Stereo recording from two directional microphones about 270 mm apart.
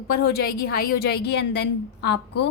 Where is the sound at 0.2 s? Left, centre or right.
Left.